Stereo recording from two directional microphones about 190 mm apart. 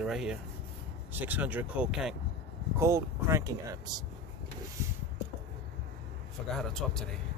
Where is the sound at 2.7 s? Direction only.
15° right (ahead or behind).